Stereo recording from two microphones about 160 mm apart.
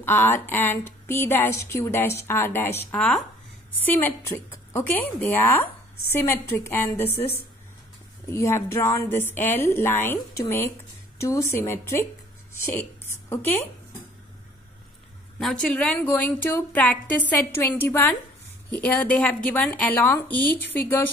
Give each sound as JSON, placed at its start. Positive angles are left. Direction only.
{"t": 0.0, "sound": "speech", "side_deg": 15}
{"t": 8.3, "sound": "speech", "side_deg": 15}
{"t": 13.3, "sound": "speech", "side_deg": 15}
{"t": 15.3, "sound": "speech", "side_deg": 0}